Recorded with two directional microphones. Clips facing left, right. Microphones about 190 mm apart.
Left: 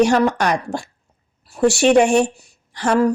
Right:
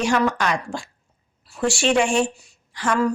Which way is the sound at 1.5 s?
60° left (ahead or behind).